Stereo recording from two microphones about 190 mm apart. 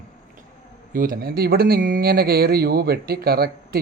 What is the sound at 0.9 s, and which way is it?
Speech, 50° right (ahead or behind).